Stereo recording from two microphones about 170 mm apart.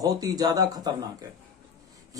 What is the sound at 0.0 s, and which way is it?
Speech, 20° right (ahead or behind).